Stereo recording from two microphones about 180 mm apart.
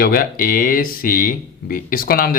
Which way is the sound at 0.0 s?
55° left (ahead or behind).